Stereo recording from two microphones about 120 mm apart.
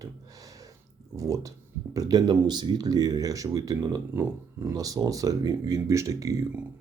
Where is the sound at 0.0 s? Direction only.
30° right (ahead or behind).